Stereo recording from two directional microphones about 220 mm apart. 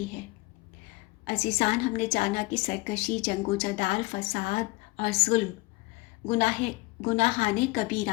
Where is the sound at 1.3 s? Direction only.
30° left (ahead or behind).